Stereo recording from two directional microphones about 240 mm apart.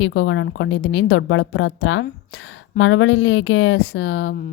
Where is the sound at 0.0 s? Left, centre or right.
Left.